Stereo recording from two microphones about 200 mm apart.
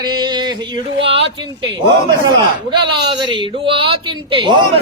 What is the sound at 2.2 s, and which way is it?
Speech, 20° right (ahead or behind).